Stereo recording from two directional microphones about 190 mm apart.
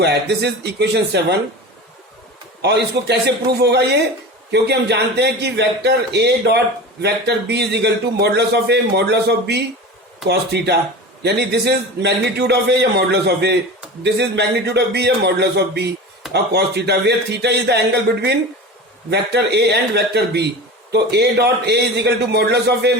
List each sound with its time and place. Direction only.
0.0 s a man's voice: 60° right (ahead or behind)
2.6 s a man's voice: 60° right (ahead or behind)